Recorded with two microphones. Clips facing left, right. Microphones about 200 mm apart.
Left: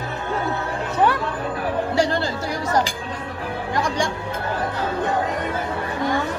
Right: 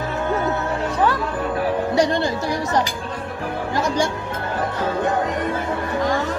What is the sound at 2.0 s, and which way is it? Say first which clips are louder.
Music: right 2 dB; 20° right (ahead or behind).